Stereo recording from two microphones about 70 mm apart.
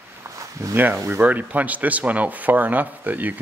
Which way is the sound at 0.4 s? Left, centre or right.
Right.